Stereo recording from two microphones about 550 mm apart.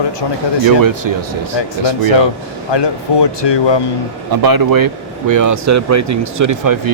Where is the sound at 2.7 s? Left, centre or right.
Left.